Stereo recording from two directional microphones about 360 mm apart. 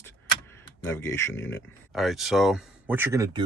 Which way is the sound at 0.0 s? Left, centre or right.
Centre.